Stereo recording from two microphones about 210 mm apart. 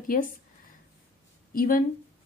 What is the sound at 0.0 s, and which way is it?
Speech, 40° left (ahead or behind).